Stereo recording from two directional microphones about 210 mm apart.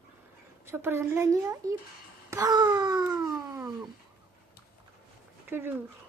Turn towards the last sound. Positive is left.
turn(degrees=-10)  # may be behind; listen again after turning